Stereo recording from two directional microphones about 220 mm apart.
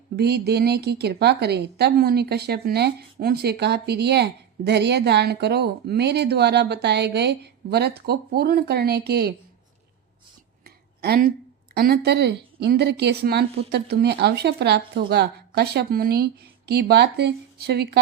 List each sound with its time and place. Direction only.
0.2 s a woman's voice: 45° right (ahead or behind)
10.6 s a sound: 45° right (ahead or behind)
11.7 s a woman's voice: 45° right (ahead or behind)